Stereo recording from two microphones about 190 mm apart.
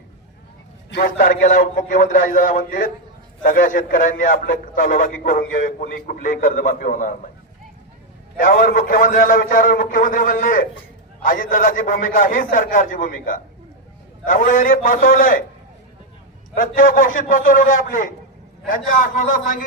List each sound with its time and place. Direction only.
0.9 s a man's voice: 60° left (ahead or behind)
1.2 s speech: 45° left (ahead or behind)
8.4 s speech: 45° left (ahead or behind)
16.6 s speech: 45° left (ahead or behind)